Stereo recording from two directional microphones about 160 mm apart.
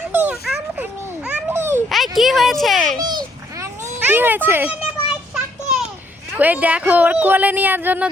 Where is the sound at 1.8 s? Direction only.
Centre (ahead or behind).